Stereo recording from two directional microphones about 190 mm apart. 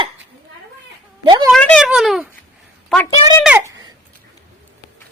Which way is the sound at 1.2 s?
25° right (ahead or behind).